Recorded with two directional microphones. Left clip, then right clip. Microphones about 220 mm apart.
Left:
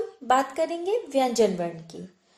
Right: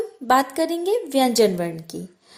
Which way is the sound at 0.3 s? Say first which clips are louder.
Right 4 dB; 40° right (ahead or behind).